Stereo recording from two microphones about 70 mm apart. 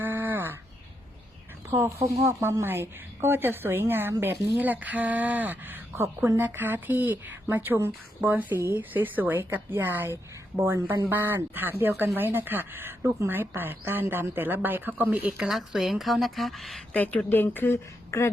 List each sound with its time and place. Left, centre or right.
0.0 s a sound: right
2.2 s a woman's voice: right; by 15.4 s centre
15.4 s a woman's voice: centre
16.9 s speech: left